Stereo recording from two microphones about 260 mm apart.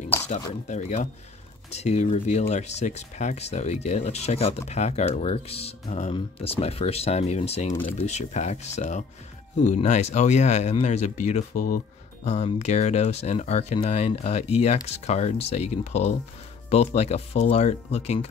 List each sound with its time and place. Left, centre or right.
0.3 s speech: left